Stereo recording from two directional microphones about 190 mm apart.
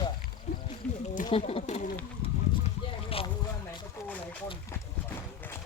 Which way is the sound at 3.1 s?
30° left (ahead or behind).